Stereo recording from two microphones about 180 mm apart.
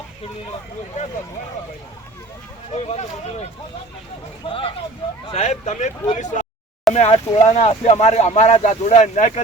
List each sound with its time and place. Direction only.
2.7 s speech: 35° left (ahead or behind)